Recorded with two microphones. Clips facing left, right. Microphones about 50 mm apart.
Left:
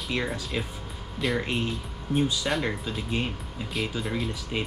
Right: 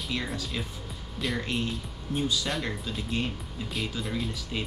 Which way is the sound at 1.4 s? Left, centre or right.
Left.